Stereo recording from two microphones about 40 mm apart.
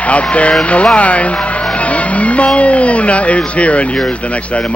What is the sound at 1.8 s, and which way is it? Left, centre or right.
Vehicle, left.